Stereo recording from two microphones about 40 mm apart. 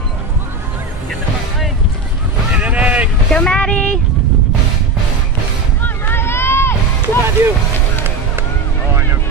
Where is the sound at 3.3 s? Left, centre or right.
Left.